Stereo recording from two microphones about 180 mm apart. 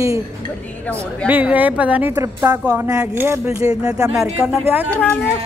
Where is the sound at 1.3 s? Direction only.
10° right (ahead or behind).